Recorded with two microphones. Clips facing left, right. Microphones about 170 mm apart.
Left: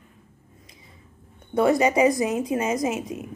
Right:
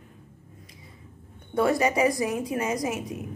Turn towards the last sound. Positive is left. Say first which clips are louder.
# left 3 dB
turn(degrees=20)  # may be behind; listen again after turning